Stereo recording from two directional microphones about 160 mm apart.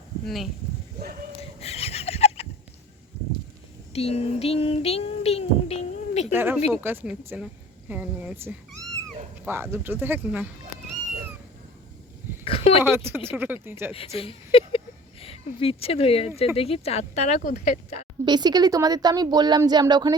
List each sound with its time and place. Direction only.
0.3 s speech: centre (ahead or behind)
1.4 s a sound: 40° left (ahead or behind)
3.9 s child singing: 40° left (ahead or behind)
6.3 s speech: 10° right (ahead or behind)
12.5 s a sound: 35° left (ahead or behind)
12.8 s speech: 15° right (ahead or behind)
13.9 s speech: 35° left (ahead or behind)
18.3 s speech: 25° right (ahead or behind)